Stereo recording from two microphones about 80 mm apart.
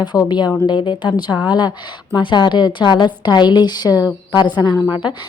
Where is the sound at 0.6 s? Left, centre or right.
Left.